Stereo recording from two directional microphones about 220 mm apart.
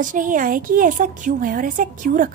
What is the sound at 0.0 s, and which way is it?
A woman's voice, 35° right (ahead or behind).